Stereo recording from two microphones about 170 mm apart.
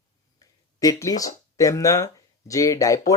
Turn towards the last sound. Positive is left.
turn(degrees=20)  # may be behind; listen again after turning